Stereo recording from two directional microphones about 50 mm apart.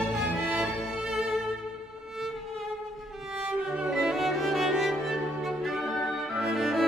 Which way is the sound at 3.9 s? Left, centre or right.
Centre.